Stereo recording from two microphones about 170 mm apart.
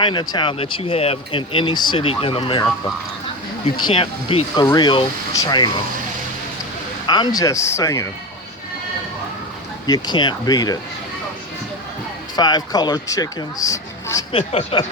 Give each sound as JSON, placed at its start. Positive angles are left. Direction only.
{"t": 0.0, "sound": "speech", "side_deg": 30}
{"t": 3.8, "sound": "speech", "side_deg": 30}
{"t": 7.1, "sound": "speech", "side_deg": 25}
{"t": 9.8, "sound": "speech", "side_deg": 25}
{"t": 12.4, "sound": "speech", "side_deg": 25}
{"t": 14.3, "sound": "speech", "side_deg": 35}